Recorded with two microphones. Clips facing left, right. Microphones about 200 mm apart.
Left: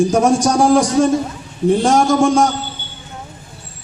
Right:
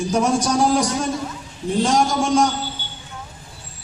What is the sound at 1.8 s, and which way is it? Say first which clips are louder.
Speech: left 3 dB; 50° left (ahead or behind).